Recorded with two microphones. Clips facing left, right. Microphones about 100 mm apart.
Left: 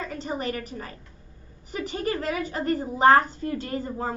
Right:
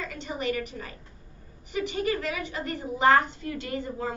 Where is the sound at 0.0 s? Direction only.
40° left (ahead or behind).